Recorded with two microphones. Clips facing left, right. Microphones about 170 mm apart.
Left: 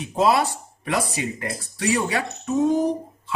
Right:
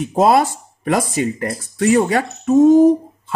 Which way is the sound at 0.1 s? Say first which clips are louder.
Right 5 dB; 50° right (ahead or behind).